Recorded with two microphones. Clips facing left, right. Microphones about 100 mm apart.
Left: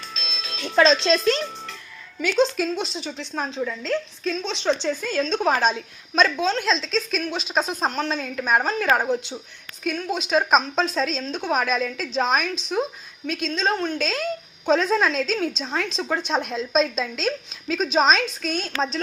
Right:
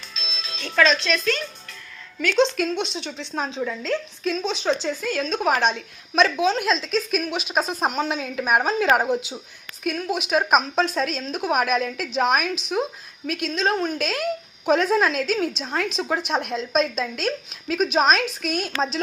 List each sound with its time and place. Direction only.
0.8 s a child's voice: 30° left (ahead or behind)
2.2 s a woman's voice: 5° left (ahead or behind)